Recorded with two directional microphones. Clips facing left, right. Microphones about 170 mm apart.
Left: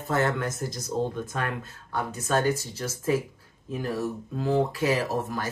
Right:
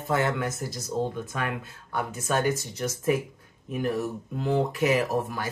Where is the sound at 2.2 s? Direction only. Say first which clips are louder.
Left 1 dB; 15° right (ahead or behind).